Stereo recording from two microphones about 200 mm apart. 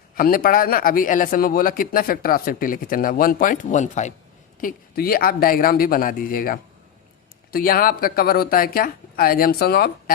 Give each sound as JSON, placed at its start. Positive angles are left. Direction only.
{"t": 0.2, "sound": "a man's voice", "side_deg": 45}
{"t": 4.6, "sound": "a man's voice", "side_deg": 50}